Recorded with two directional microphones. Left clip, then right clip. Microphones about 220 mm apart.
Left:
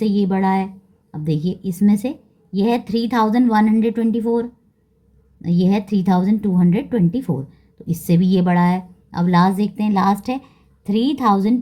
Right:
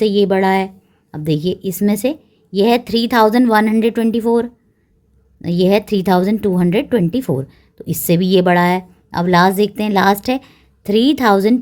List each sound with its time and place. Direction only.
0.0 s speech: 45° right (ahead or behind)